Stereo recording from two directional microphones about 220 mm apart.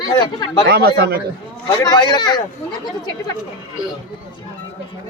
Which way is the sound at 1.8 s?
20° left (ahead or behind).